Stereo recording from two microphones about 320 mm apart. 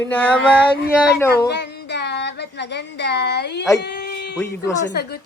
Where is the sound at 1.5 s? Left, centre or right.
Left.